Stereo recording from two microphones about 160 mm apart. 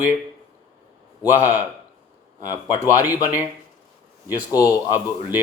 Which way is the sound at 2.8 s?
10° right (ahead or behind).